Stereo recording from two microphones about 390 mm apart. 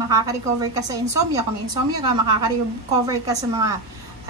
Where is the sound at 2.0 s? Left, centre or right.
Centre.